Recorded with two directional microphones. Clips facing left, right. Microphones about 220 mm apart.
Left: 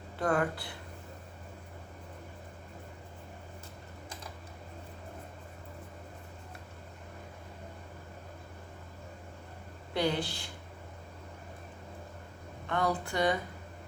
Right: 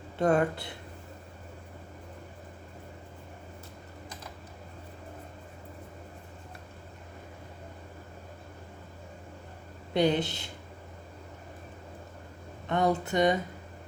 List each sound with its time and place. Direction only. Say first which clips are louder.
0.2 s speech: right 5 dB; 25° right (ahead or behind)
9.9 s speech: right 5 dB; 20° right (ahead or behind)
12.6 s speech: right 5 dB; 20° right (ahead or behind)